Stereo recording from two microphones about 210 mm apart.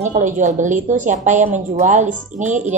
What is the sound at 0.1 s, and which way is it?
A woman's voice, 35° right (ahead or behind).